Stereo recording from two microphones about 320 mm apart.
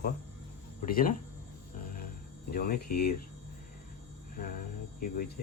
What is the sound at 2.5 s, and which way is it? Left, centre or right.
Speech, left.